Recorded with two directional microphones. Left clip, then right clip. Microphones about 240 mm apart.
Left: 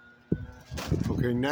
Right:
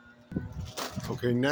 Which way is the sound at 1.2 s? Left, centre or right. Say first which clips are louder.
Right 3 dB; centre.